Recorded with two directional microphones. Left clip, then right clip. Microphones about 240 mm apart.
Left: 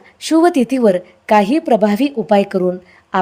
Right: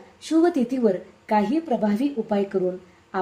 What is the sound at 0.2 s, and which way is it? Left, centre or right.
A woman's voice, left.